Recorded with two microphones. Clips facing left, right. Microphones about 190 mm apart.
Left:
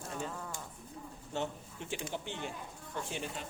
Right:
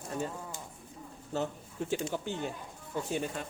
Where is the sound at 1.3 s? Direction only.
40° right (ahead or behind).